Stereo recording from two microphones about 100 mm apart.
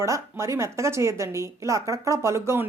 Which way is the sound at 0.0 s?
30° right (ahead or behind).